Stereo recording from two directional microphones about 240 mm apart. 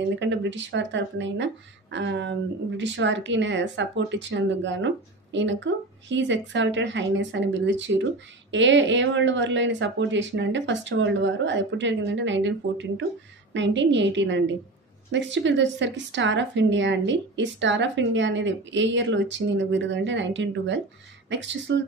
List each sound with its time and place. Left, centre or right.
0.2 s speech: right